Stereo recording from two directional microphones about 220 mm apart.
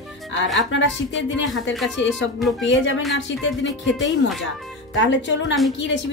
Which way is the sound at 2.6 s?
55° left (ahead or behind).